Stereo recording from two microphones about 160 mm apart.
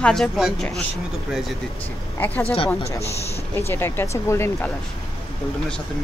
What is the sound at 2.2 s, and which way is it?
Speech, 10° left (ahead or behind).